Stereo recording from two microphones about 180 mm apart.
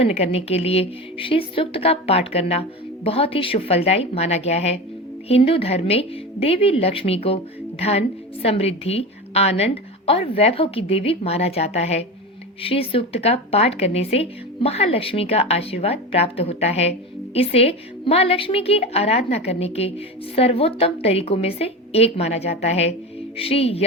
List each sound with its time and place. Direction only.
0.0 s a woman's voice: 35° left (ahead or behind)